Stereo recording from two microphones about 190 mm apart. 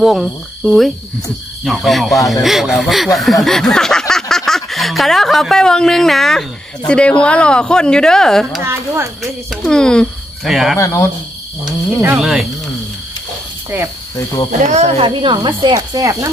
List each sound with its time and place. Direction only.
0.0 s speech: centre (ahead or behind)
8.6 s speech: 15° right (ahead or behind)
9.5 s speech: 5° left (ahead or behind)
10.8 s speech: 15° left (ahead or behind)
12.2 s speech: centre (ahead or behind)
14.1 s speech: 15° left (ahead or behind)
14.7 s speech: 35° right (ahead or behind); by 16.3 s 20° right (ahead or behind)